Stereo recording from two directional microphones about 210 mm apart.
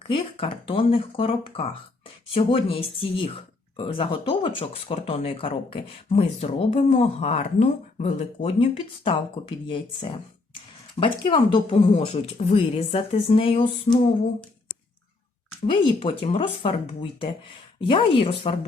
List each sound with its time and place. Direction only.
0.1 s speech: 25° left (ahead or behind)
15.6 s speech: 25° left (ahead or behind)